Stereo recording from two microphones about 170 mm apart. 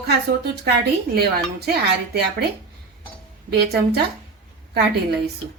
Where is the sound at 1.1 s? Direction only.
70° right (ahead or behind).